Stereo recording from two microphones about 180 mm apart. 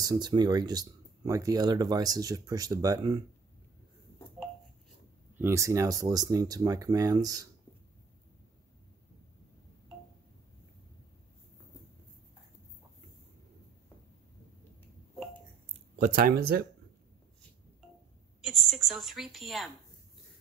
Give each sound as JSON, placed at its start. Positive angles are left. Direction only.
{"t": 0.0, "sound": "speech", "side_deg": -20}
{"t": 5.4, "sound": "speech", "side_deg": -15}
{"t": 16.0, "sound": "speech", "side_deg": -50}
{"t": 18.5, "sound": "a woman's voice", "side_deg": 0}